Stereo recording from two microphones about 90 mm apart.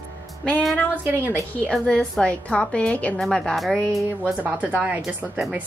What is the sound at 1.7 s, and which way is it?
A woman's voice, 5° left (ahead or behind).